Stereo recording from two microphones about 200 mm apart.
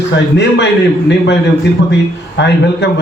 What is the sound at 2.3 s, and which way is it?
Speech, 60° left (ahead or behind).